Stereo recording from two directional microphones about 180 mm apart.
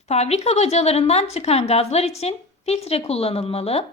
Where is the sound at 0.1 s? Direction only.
35° left (ahead or behind).